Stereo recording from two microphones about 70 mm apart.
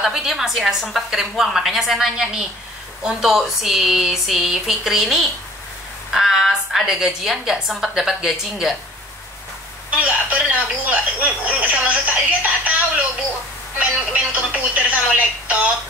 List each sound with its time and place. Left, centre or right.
0.0 s a woman's voice: centre
9.8 s speech: centre
13.7 s speech: right